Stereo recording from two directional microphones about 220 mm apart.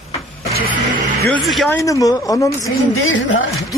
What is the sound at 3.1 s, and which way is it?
Speech, 60° left (ahead or behind).